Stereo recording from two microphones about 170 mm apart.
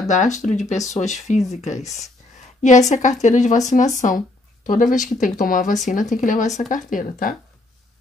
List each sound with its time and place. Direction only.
0.1 s speech: 45° left (ahead or behind)